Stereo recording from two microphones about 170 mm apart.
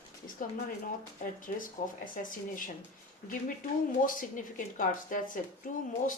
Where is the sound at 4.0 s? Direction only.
50° left (ahead or behind).